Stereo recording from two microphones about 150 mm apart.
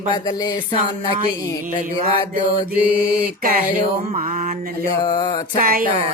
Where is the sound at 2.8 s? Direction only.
10° right (ahead or behind).